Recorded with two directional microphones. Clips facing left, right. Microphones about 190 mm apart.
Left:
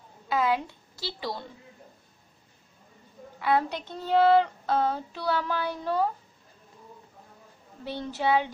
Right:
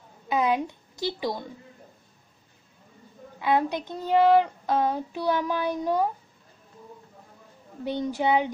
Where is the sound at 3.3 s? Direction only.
15° right (ahead or behind).